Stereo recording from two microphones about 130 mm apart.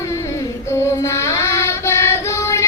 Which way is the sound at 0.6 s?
20° left (ahead or behind).